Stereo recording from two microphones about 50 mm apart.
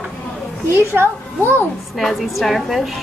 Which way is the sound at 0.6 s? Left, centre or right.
Right.